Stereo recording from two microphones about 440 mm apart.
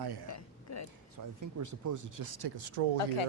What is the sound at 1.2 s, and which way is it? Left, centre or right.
Speech, right.